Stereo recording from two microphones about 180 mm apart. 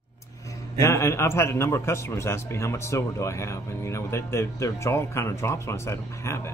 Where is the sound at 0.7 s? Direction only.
15° left (ahead or behind).